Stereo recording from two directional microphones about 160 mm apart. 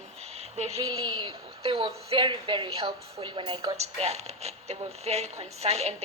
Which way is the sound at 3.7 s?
40° right (ahead or behind).